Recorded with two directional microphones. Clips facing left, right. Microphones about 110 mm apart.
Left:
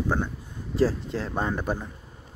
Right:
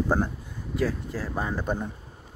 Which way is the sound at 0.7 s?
25° left (ahead or behind).